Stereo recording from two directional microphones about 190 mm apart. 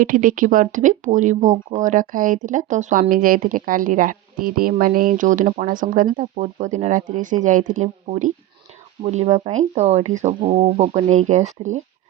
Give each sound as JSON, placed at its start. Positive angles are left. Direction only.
{"t": 0.0, "sound": "speech", "side_deg": -45}